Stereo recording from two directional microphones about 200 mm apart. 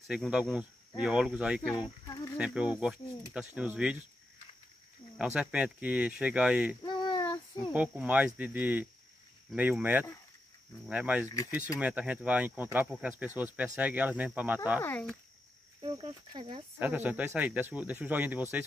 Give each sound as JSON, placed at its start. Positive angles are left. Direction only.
{"t": 0.1, "sound": "speech", "side_deg": -5}
{"t": 1.8, "sound": "a sound", "side_deg": 20}
{"t": 2.3, "sound": "speech", "side_deg": -5}
{"t": 5.1, "sound": "speech", "side_deg": -5}
{"t": 6.8, "sound": "a sound", "side_deg": 20}
{"t": 7.7, "sound": "speech", "side_deg": -5}
{"t": 14.8, "sound": "speech", "side_deg": 10}
{"t": 15.8, "sound": "speech", "side_deg": -25}
{"t": 16.8, "sound": "speech", "side_deg": -10}